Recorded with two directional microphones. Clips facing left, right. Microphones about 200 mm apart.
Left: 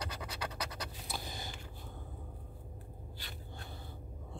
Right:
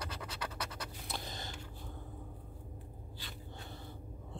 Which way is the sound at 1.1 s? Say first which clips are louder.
Right 1 dB; 5° left (ahead or behind).